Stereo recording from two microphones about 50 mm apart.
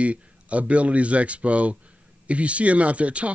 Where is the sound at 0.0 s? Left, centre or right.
Right.